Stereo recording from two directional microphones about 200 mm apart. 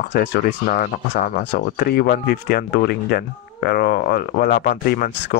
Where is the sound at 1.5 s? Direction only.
50° left (ahead or behind).